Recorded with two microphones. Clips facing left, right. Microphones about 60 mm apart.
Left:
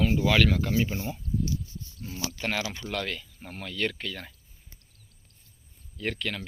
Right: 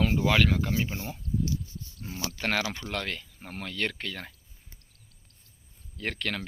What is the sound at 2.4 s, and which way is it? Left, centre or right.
Speech, right.